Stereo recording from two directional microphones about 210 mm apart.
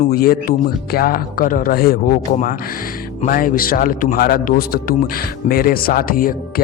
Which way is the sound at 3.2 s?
40° left (ahead or behind).